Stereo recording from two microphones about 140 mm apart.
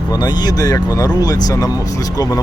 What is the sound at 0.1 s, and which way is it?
Speech, 30° left (ahead or behind).